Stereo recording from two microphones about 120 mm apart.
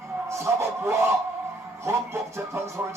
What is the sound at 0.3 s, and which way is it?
Music, 25° right (ahead or behind).